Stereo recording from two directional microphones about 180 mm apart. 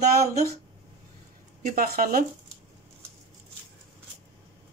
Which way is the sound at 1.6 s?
55° right (ahead or behind).